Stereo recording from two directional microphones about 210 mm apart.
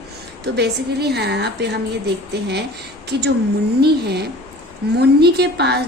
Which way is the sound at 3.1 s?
50° right (ahead or behind).